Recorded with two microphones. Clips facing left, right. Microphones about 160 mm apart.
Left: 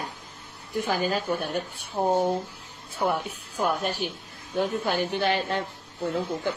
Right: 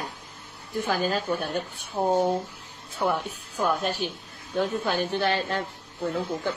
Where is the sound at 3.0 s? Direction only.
10° left (ahead or behind).